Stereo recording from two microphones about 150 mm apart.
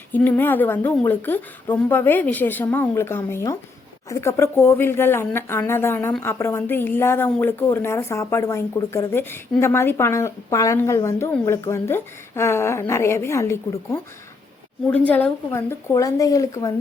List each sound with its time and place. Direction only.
0.1 s a woman's voice: 10° left (ahead or behind)